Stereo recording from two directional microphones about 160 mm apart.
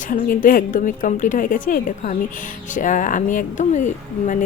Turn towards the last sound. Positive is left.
turn(degrees=50)  # may be behind; listen again after turning